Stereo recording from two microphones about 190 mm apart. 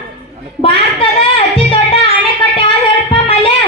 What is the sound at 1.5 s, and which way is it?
Music, 30° left (ahead or behind).